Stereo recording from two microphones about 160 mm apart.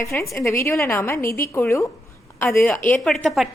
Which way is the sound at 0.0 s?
20° left (ahead or behind).